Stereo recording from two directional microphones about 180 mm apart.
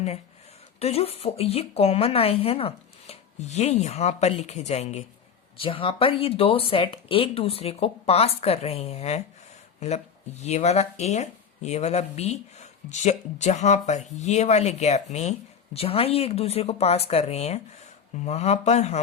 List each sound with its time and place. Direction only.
0.8 s speech: 35° left (ahead or behind)
10.4 s speech: 40° left (ahead or behind)